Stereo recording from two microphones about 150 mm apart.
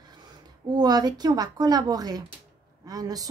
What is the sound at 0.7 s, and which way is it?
Speech, 25° right (ahead or behind).